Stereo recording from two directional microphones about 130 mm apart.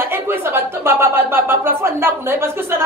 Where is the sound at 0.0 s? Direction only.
20° right (ahead or behind).